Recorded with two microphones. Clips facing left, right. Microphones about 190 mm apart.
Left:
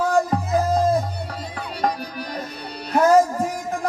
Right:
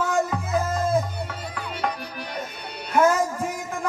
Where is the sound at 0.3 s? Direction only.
35° left (ahead or behind).